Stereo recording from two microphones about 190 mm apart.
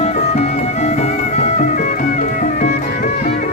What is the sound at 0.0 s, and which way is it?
Music, 35° left (ahead or behind).